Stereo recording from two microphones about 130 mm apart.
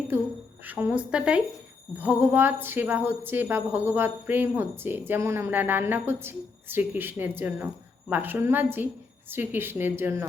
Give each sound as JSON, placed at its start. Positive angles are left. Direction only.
{"t": 0.6, "sound": "a woman's voice", "side_deg": -15}